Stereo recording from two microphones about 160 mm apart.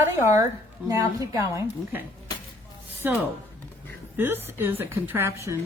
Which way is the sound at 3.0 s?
10° right (ahead or behind).